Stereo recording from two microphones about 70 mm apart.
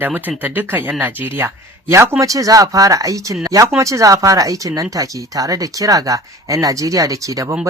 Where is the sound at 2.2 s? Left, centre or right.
Right.